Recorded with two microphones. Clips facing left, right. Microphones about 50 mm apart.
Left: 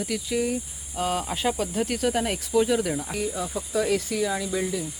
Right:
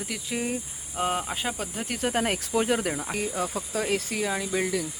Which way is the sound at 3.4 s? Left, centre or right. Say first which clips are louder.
Left 2 dB; right.